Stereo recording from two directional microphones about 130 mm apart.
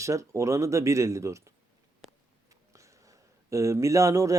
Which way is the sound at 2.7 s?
25° right (ahead or behind).